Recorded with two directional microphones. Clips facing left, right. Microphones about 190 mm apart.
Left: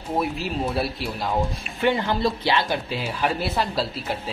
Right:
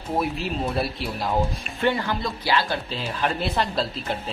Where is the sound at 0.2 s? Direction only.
Centre (ahead or behind).